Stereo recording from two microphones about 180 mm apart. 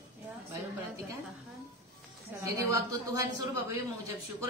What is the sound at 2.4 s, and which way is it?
Speech, 20° right (ahead or behind).